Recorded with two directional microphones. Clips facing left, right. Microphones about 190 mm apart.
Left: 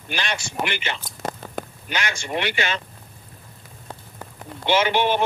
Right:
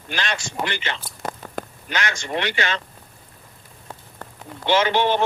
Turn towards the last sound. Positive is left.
turn(degrees=10)  # may be behind; listen again after turning